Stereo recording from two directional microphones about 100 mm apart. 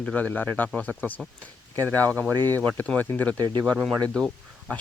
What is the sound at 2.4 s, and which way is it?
Speech, 35° right (ahead or behind).